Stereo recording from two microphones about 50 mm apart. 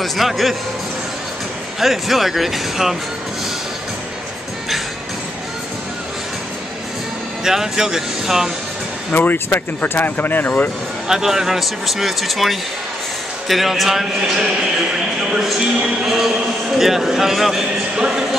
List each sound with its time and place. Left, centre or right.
0.0 s speech: centre
1.8 s speech: centre
7.4 s a man's voice: centre
9.1 s speech: left
11.1 s speech: centre
16.0 s a man's voice: centre